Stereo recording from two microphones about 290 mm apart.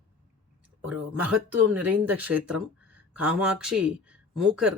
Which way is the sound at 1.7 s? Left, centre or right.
Centre.